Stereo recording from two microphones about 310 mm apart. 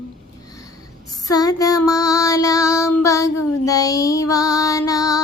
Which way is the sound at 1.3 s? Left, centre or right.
Centre.